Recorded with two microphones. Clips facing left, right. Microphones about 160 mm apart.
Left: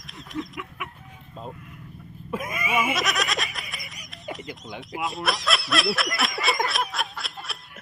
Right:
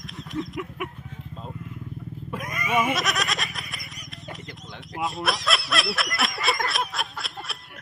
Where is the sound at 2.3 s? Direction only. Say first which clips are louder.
Right 1 dB; 5° left (ahead or behind).